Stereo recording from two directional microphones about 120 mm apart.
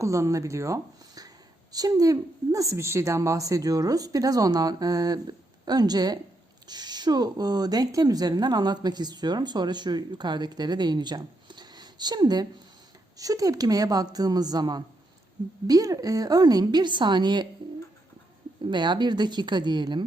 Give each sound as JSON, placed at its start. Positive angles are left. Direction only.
{"t": 0.0, "sound": "speech", "side_deg": -25}
{"t": 18.7, "sound": "speech", "side_deg": -40}